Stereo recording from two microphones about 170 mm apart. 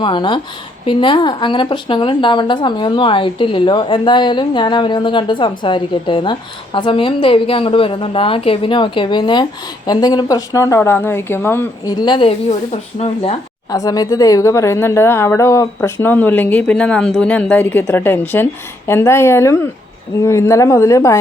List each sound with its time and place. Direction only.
0.0 s speech: 30° left (ahead or behind)
11.9 s speech: 25° left (ahead or behind)
12.5 s speech: 40° left (ahead or behind)
13.7 s speech: 20° left (ahead or behind)